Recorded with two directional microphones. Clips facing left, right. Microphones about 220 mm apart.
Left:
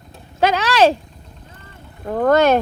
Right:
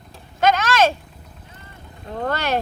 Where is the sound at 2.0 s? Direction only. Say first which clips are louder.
Left 11 dB; 50° left (ahead or behind).